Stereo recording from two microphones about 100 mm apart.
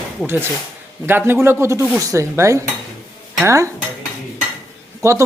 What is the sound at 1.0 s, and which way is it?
Speech, 20° right (ahead or behind).